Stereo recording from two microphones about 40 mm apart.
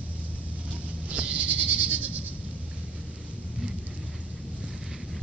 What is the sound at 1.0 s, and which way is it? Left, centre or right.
Goat, right.